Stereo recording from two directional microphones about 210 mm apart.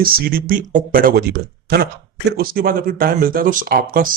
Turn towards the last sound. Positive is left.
turn(degrees=-40)  # may be behind; listen again after turning